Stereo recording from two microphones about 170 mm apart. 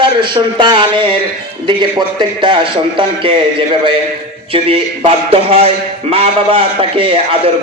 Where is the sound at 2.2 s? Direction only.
30° right (ahead or behind).